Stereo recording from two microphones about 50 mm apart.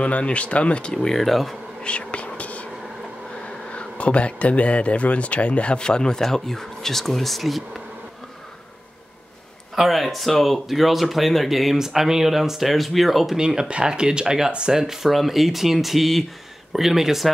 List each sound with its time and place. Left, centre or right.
0.0 s speech: left
0.9 s speech: centre
1.8 s whispering: left
3.3 s speech: left; by 7.8 s centre
9.8 s speech: centre
13.4 s speech: centre